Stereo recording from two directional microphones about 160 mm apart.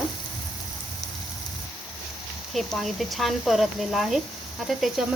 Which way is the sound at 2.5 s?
Centre (ahead or behind).